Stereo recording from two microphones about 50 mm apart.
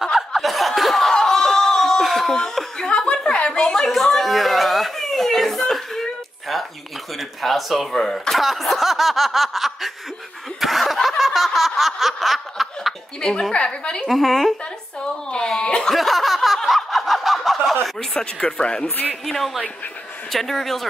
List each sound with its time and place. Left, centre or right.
0.0 s snicker: centre
2.3 s a sound: centre
7.2 s speech: centre
10.6 s snicker: centre
13.2 s speech: centre
14.0 s speech: centre
15.2 s a sound: centre
15.9 s snicker: centre
18.1 s speech: centre
19.2 s speech: centre